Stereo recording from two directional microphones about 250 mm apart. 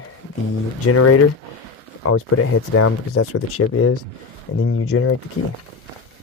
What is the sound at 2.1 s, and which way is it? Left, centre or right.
Speech, left.